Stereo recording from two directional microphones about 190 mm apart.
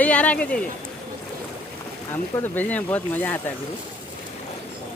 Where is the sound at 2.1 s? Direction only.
10° left (ahead or behind).